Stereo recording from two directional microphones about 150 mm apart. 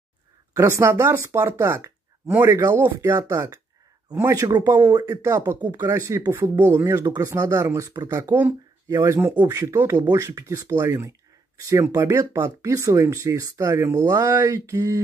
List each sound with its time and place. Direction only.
0.6 s speech: 20° right (ahead or behind)